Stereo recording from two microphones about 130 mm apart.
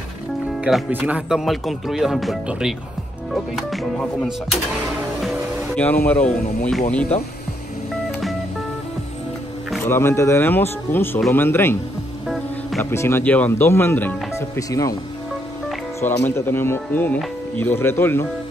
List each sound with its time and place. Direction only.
0.6 s speech: 5° right (ahead or behind)
5.8 s speech: 10° left (ahead or behind)
9.8 s speech: 20° left (ahead or behind)
12.9 s speech: 20° left (ahead or behind)
16.0 s speech: 20° left (ahead or behind)